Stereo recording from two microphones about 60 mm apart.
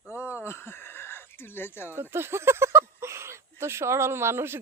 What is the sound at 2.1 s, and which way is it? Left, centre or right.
Speech, right.